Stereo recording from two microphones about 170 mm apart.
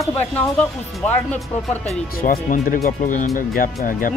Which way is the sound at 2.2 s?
55° left (ahead or behind).